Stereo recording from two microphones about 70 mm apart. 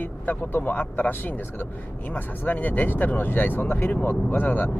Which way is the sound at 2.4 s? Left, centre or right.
Left.